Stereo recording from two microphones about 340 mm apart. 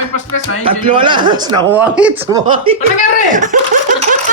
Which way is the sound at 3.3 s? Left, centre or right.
Right.